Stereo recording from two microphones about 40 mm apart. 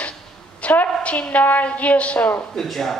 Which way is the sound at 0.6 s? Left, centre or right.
Left.